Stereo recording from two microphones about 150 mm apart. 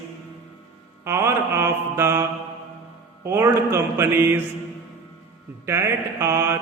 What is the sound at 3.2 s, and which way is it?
Music, 15° right (ahead or behind).